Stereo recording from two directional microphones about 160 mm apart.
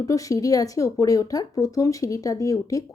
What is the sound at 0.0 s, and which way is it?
Speech, 20° left (ahead or behind).